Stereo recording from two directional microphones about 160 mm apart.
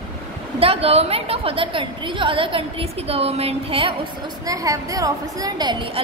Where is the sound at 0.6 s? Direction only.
35° right (ahead or behind).